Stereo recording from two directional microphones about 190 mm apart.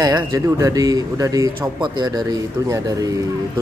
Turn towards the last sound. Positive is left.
turn(degrees=-20)  # may be behind; listen again after turning